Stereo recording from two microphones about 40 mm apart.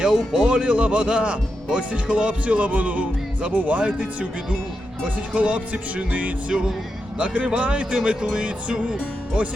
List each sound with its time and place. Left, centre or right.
0.0 s speech: centre; by 6.3 s right
7.2 s speech: right